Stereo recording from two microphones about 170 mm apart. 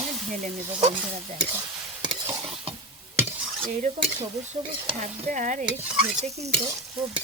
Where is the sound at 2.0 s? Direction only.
30° right (ahead or behind).